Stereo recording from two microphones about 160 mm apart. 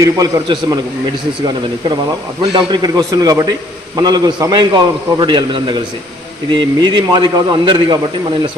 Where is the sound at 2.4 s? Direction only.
25° right (ahead or behind).